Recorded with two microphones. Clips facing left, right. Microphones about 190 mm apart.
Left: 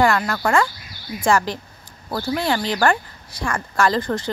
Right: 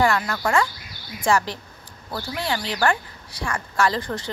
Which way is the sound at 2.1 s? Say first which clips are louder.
Left 6 dB; 45° left (ahead or behind).